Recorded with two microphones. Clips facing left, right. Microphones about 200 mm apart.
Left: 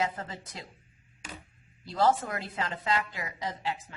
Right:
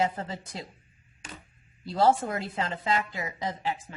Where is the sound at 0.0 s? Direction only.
30° right (ahead or behind).